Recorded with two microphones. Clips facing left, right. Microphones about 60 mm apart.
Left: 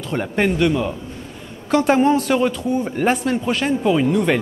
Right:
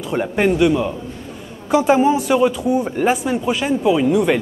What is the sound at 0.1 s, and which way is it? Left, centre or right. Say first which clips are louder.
A man's voice: right 2 dB; centre.